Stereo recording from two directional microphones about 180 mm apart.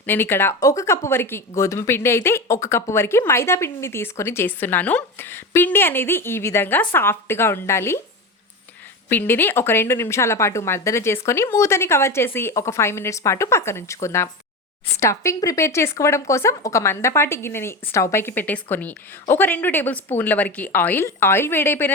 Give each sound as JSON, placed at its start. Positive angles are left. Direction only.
{"t": 0.0, "sound": "speech", "side_deg": 10}
{"t": 9.0, "sound": "speech", "side_deg": 10}